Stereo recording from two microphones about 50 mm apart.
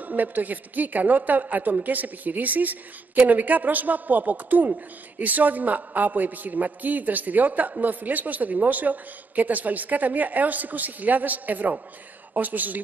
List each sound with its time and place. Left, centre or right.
0.0 s a woman's voice: right